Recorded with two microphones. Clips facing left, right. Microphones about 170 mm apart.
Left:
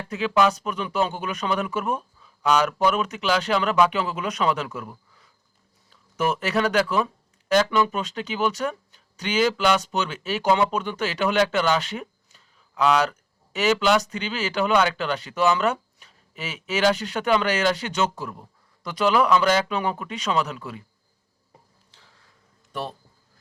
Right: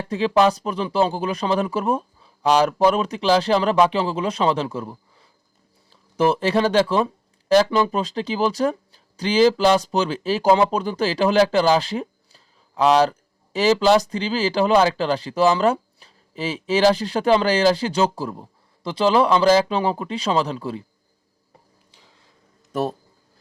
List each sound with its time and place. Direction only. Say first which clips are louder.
0.0 s speech: right 4 dB; 30° right (ahead or behind)
22.7 s speech: right 8 dB; 40° right (ahead or behind)